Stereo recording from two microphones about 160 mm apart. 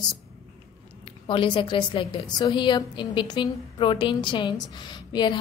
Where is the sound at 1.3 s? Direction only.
30° left (ahead or behind).